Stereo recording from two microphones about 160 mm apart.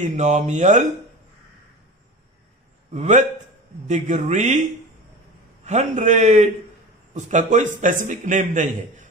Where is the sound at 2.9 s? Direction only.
50° right (ahead or behind).